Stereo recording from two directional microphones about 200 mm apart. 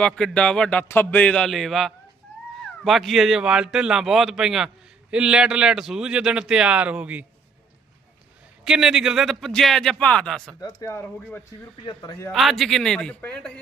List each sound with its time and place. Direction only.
0.0 s speech: 5° left (ahead or behind)
8.6 s speech: 5° right (ahead or behind)
10.6 s speech: 20° left (ahead or behind)
11.9 s a man's voice: 20° left (ahead or behind)
12.3 s speech: centre (ahead or behind)